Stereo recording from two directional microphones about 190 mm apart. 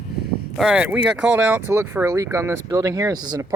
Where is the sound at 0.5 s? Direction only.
5° right (ahead or behind).